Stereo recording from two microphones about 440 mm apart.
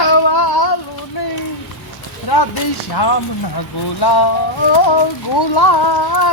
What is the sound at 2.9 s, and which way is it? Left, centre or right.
Speech, left.